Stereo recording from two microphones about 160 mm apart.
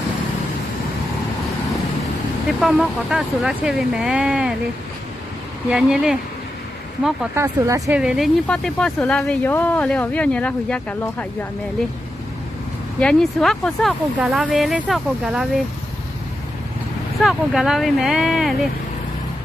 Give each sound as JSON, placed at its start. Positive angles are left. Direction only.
{"t": 2.6, "sound": "speech", "side_deg": 0}
{"t": 5.7, "sound": "speech", "side_deg": -5}
{"t": 7.3, "sound": "speech", "side_deg": -20}
{"t": 7.9, "sound": "speech", "side_deg": -5}
{"t": 13.0, "sound": "speech", "side_deg": 0}
{"t": 17.2, "sound": "speech", "side_deg": 0}